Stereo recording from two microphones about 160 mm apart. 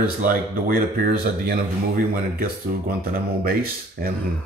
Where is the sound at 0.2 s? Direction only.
60° right (ahead or behind).